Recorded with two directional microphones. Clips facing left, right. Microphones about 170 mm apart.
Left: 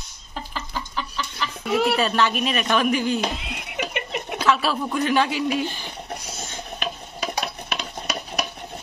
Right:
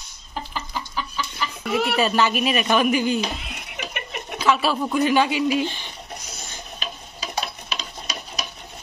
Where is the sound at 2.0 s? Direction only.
5° right (ahead or behind).